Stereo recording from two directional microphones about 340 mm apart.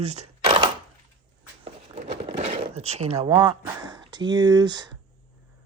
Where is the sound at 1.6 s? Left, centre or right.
Centre.